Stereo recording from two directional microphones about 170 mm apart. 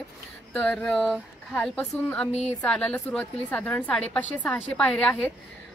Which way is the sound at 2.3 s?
40° left (ahead or behind).